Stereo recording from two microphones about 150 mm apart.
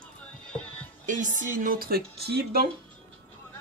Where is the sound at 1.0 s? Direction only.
60° right (ahead or behind); by 2.6 s 90° right.